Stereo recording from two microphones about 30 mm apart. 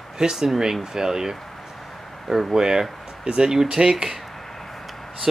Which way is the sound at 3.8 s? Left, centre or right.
Right.